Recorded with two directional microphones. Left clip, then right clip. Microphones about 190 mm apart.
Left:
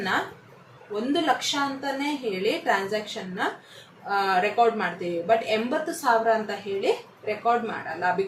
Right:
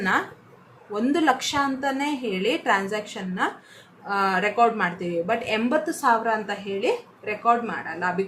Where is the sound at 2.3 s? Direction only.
25° right (ahead or behind).